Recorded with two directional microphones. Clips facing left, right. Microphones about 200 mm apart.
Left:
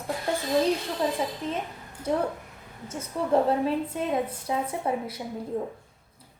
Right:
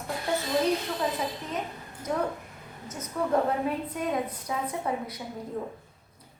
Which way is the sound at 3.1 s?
25° left (ahead or behind).